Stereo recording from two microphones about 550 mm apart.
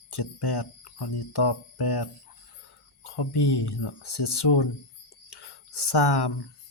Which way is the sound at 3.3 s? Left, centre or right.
Left.